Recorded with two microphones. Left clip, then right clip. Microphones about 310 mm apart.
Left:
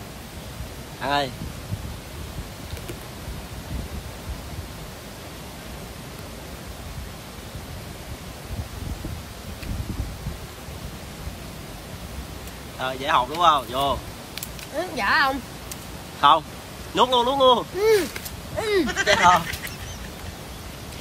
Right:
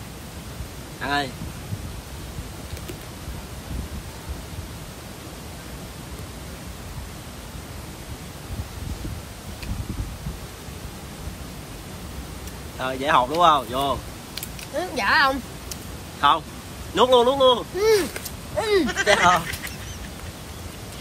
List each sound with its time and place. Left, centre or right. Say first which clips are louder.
1.0 s speech: left 1 dB; centre
12.8 s speech: right 2 dB; centre